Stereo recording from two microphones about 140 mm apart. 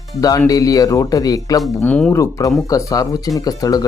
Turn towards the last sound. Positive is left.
turn(degrees=25)  # may be behind; listen again after turning